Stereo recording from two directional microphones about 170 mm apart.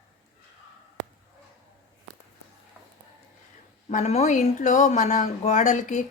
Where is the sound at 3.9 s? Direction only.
40° left (ahead or behind).